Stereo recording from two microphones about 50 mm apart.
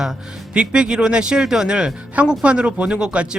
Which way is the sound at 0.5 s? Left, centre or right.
Centre.